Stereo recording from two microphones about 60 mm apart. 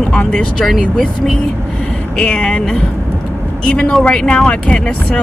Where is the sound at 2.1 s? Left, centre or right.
Centre.